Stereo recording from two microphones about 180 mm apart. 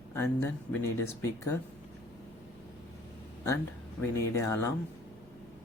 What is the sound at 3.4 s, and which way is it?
Speech, 15° left (ahead or behind).